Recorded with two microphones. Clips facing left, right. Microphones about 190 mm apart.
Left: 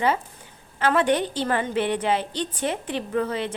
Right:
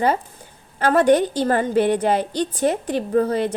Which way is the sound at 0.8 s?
40° right (ahead or behind).